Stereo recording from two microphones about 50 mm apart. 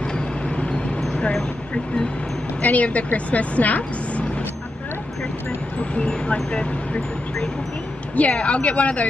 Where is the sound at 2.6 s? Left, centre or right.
Left.